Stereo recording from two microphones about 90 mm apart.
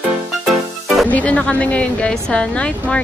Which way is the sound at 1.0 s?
15° left (ahead or behind).